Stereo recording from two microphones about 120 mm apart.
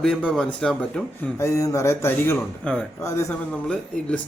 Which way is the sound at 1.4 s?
25° left (ahead or behind).